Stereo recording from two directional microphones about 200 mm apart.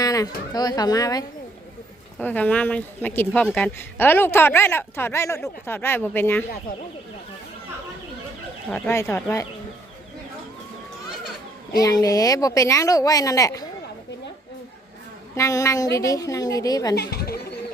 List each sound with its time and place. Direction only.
0.0 s a woman's voice: 20° left (ahead or behind)
2.1 s speech: 5° left (ahead or behind)
8.7 s speech: 5° left (ahead or behind)
11.8 s speech: 20° left (ahead or behind)
15.4 s speech: 15° left (ahead or behind)
16.9 s speech: 50° left (ahead or behind)